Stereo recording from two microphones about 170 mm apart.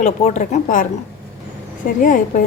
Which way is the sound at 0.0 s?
45° left (ahead or behind).